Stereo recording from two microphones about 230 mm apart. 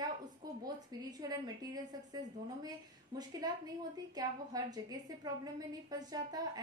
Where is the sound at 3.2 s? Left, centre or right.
Centre.